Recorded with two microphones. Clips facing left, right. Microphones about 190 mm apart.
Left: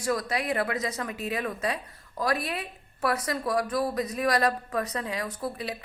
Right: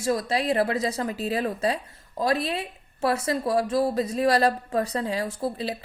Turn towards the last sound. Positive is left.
turn(degrees=-30)  # may be behind; listen again after turning